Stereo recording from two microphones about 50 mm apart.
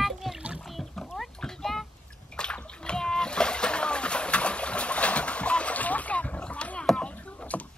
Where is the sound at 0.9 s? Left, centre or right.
Centre.